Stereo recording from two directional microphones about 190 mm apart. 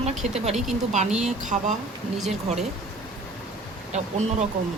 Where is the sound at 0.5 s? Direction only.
Centre (ahead or behind).